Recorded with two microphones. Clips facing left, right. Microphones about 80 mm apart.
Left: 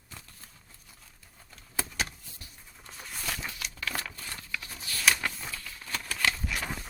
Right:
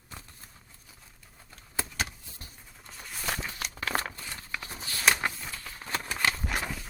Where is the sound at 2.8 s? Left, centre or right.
Centre.